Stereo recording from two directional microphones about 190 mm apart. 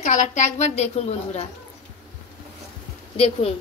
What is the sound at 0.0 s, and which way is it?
A woman's voice, 40° left (ahead or behind).